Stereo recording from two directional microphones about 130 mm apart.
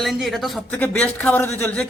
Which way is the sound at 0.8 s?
10° left (ahead or behind).